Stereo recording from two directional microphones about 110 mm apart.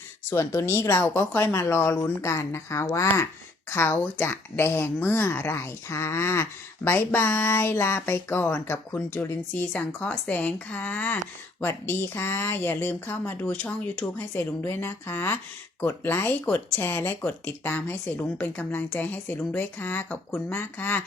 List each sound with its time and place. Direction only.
0.3 s a woman's voice: 25° left (ahead or behind)